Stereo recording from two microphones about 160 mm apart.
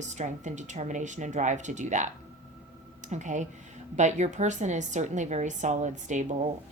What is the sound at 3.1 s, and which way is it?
A woman's voice, 50° right (ahead or behind).